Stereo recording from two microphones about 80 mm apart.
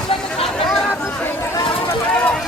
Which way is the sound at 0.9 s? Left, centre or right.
Left.